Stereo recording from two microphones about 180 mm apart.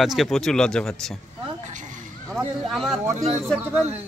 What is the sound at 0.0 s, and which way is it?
Speech, centre (ahead or behind).